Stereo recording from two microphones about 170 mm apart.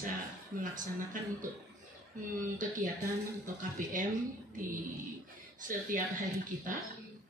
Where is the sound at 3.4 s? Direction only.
50° right (ahead or behind).